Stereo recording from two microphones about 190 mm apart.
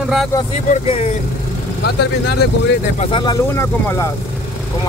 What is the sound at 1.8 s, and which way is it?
Speech, 55° left (ahead or behind).